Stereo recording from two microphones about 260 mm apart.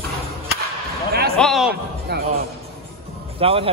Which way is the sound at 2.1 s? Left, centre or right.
Right.